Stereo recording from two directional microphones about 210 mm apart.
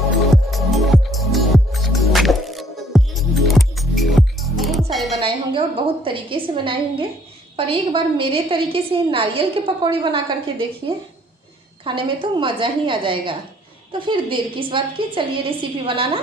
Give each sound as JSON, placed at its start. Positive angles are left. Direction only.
{"t": 0.3, "sound": "music", "side_deg": 0}
{"t": 5.2, "sound": "a woman's voice", "side_deg": -25}
{"t": 11.8, "sound": "a woman's voice", "side_deg": -25}